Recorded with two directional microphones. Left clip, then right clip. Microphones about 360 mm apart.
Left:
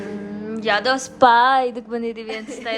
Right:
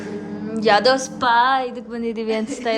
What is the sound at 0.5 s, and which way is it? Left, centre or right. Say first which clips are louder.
A woman's voice: right 4 dB; centre.